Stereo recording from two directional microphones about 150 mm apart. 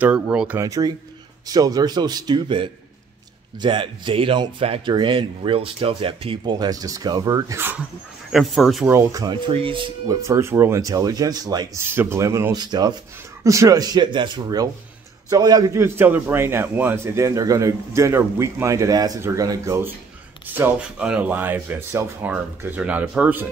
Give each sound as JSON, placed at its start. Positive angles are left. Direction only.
{"t": 0.0, "sound": "speech", "side_deg": -10}
{"t": 0.6, "sound": "a man's voice", "side_deg": -20}
{"t": 8.3, "sound": "a man's voice", "side_deg": 0}
{"t": 8.9, "sound": "a man's voice", "side_deg": -20}
{"t": 9.5, "sound": "speech", "side_deg": -35}
{"t": 10.2, "sound": "a man's voice", "side_deg": -20}